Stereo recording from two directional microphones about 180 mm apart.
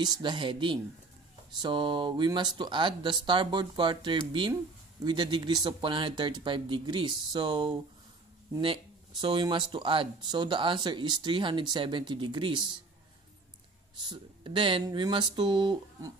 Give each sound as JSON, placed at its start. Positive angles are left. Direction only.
{"t": 0.0, "sound": "speech", "side_deg": -25}
{"t": 9.2, "sound": "speech", "side_deg": -25}
{"t": 14.0, "sound": "speech", "side_deg": -25}